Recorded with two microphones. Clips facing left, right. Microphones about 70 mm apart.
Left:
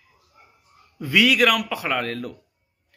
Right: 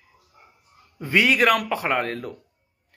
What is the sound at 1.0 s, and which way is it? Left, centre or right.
Speech, right.